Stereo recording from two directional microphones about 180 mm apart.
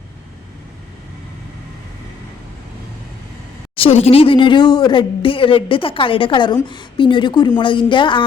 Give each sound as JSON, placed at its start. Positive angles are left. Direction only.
{"t": 3.8, "sound": "speech", "side_deg": 35}